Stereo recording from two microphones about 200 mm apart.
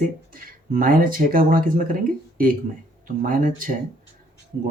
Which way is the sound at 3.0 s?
45° right (ahead or behind).